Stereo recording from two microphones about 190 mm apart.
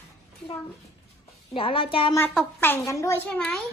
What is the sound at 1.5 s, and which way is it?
Speech, 30° left (ahead or behind).